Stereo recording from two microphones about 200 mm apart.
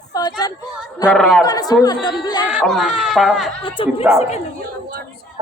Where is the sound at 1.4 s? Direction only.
20° left (ahead or behind).